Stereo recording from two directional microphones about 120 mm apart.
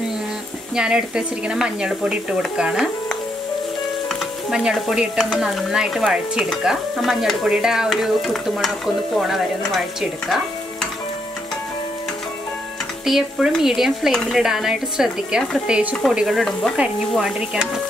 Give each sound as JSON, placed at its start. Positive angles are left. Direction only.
{"t": 0.7, "sound": "speech", "side_deg": -5}
{"t": 4.1, "sound": "stir", "side_deg": -5}
{"t": 13.0, "sound": "stir", "side_deg": 0}